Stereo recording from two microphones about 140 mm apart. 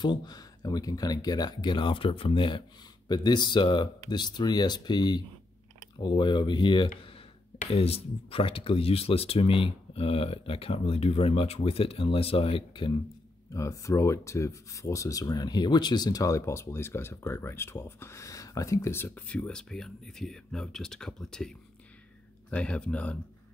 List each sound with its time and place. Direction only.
0.0 s speech: 30° left (ahead or behind)
13.5 s speech: 20° left (ahead or behind)